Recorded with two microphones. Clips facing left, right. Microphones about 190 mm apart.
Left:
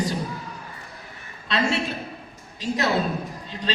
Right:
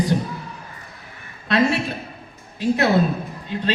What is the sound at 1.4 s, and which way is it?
A woman's voice, 55° right (ahead or behind).